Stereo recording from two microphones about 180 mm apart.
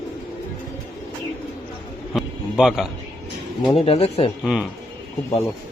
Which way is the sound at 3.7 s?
30° left (ahead or behind).